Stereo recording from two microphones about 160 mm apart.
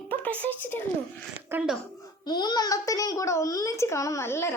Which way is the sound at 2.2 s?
25° left (ahead or behind).